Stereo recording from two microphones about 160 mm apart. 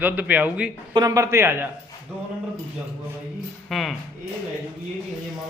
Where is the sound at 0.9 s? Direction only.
20° right (ahead or behind).